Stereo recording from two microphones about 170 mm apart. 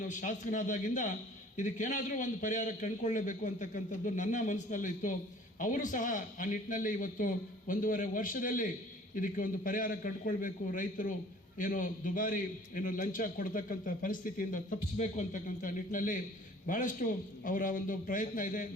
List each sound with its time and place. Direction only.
0.0 s a man's voice: 50° left (ahead or behind)